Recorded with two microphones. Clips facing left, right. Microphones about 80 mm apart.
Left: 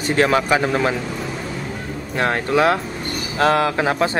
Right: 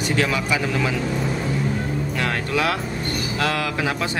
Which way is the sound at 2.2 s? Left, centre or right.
Left.